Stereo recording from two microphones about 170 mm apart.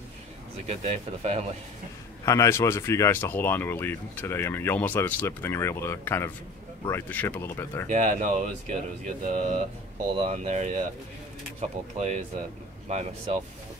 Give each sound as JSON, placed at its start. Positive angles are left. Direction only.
{"t": 0.7, "sound": "speech", "side_deg": -40}
{"t": 2.2, "sound": "speech", "side_deg": 20}
{"t": 7.9, "sound": "speech", "side_deg": -45}